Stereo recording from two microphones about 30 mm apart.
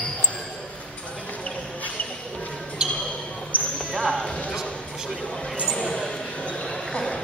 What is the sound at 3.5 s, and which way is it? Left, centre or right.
Basketball bounce, left.